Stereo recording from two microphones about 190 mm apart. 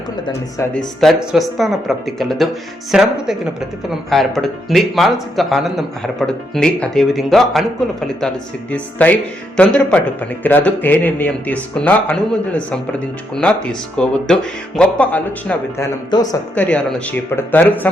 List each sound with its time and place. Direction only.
0.7 s speech: 5° left (ahead or behind)
8.7 s a man's voice: 5° left (ahead or behind)
16.0 s speech: 20° left (ahead or behind)
16.6 s a man's voice: 5° left (ahead or behind)